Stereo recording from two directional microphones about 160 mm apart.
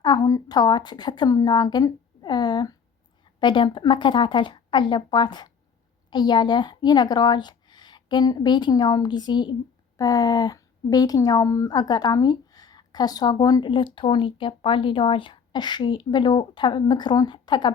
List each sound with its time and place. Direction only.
0.0 s a woman's voice: 25° left (ahead or behind)